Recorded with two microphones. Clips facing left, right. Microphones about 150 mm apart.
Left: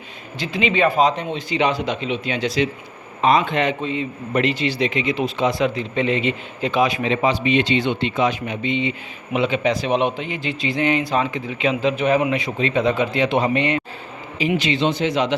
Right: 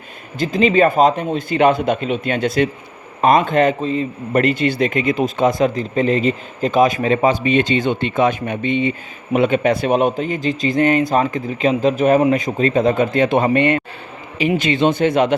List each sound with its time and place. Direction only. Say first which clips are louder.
0.3 s a man's voice: right 6 dB; 45° right (ahead or behind)